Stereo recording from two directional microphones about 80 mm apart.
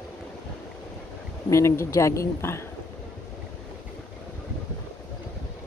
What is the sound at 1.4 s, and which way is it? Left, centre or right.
Speech, left.